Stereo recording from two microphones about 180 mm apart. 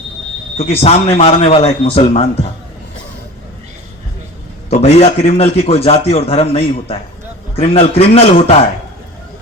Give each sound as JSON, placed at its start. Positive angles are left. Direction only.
{"t": 0.5, "sound": "a man's voice", "side_deg": 35}
{"t": 4.7, "sound": "a man's voice", "side_deg": 35}